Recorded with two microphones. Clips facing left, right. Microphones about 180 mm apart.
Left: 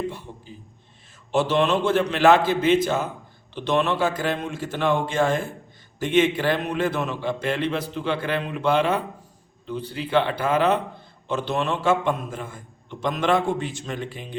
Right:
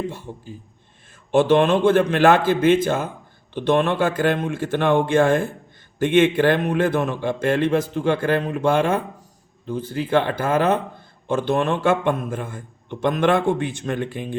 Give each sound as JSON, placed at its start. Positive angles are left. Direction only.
{"t": 0.1, "sound": "a man's voice", "side_deg": -45}